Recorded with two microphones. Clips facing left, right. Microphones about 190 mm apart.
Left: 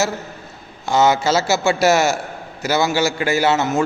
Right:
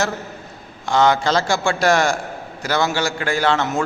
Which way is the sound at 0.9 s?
5° left (ahead or behind).